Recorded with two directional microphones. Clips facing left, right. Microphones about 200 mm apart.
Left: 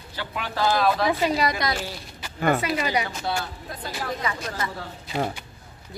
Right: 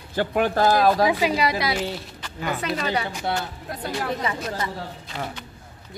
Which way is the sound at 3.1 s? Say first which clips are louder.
Right 2 dB; 15° right (ahead or behind).